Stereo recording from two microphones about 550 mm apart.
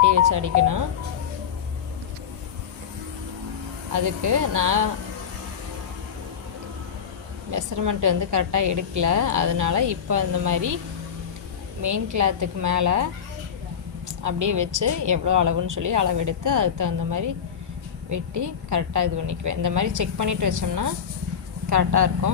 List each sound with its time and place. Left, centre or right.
0.0 s speech: right
3.9 s a woman's voice: right
7.5 s a woman's voice: right
11.8 s a woman's voice: right
14.3 s a woman's voice: right